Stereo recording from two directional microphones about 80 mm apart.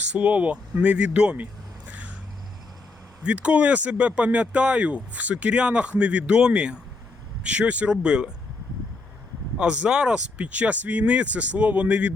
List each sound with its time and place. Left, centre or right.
0.1 s speech: centre
1.9 s vehicle: centre
3.2 s speech: centre
9.6 s speech: centre